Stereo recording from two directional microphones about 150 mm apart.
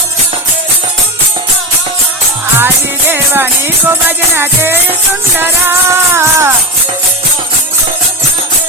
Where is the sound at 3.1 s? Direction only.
15° right (ahead or behind).